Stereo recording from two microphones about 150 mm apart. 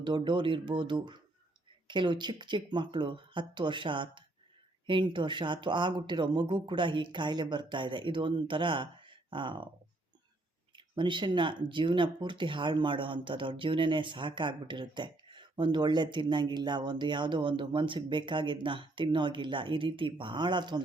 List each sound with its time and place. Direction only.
0.0 s speech: 30° right (ahead or behind)
10.8 s speech: 30° right (ahead or behind)